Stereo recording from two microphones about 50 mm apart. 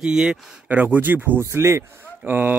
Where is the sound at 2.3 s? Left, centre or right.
Right.